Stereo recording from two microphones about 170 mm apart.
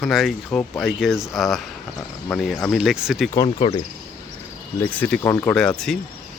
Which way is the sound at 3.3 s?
30° left (ahead or behind).